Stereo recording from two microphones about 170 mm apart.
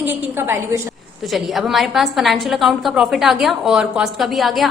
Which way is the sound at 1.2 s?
Centre (ahead or behind).